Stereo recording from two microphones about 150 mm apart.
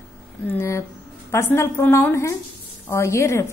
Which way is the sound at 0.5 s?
15° left (ahead or behind).